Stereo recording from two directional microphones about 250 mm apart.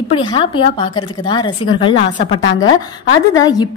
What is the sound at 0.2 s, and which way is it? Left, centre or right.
A woman's voice, centre.